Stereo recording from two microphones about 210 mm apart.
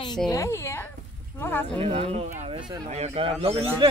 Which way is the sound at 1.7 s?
30° right (ahead or behind).